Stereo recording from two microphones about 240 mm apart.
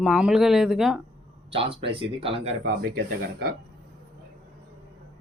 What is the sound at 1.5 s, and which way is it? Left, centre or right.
Speech, right.